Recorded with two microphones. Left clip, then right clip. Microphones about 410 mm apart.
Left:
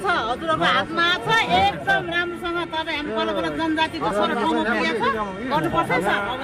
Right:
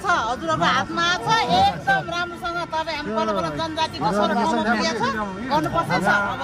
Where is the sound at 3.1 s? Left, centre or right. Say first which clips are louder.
Right 1 dB; centre.